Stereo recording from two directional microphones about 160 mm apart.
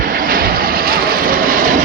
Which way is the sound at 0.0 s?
60° right (ahead or behind).